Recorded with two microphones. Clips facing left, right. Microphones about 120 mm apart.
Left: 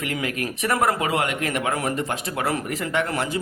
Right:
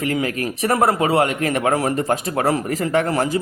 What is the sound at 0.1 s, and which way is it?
A man's voice, 35° right (ahead or behind).